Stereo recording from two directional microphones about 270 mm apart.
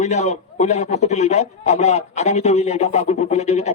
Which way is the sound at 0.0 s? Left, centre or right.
Left.